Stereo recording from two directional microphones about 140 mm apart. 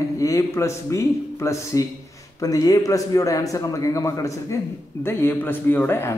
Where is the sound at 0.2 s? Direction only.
20° left (ahead or behind).